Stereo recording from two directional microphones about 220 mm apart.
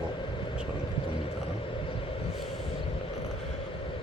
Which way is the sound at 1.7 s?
25° left (ahead or behind).